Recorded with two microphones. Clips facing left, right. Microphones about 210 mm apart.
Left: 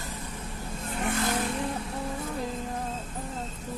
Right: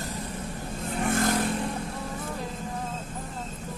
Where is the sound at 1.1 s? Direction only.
45° right (ahead or behind).